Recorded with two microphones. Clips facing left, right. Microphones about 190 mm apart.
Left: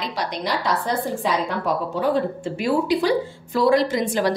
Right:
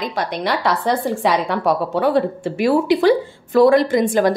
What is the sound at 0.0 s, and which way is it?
A woman's voice, 50° right (ahead or behind).